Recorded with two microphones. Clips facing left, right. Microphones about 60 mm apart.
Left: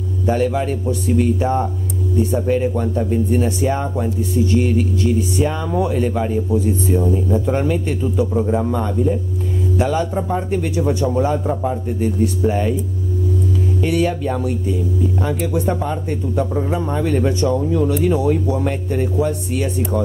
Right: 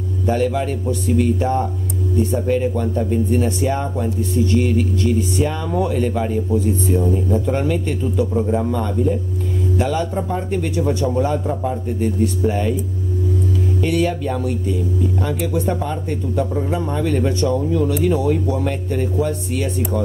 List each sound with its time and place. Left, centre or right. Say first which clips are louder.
0.3 s speech: left 1 dB; centre
13.7 s speech: left 1 dB; centre